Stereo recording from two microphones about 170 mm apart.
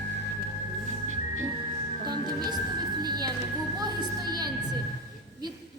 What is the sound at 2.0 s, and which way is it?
Speech, 25° right (ahead or behind).